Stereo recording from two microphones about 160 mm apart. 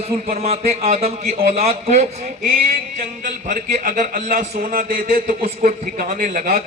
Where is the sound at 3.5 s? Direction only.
55° right (ahead or behind).